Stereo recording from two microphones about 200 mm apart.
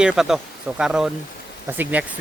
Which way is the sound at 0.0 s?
5° right (ahead or behind).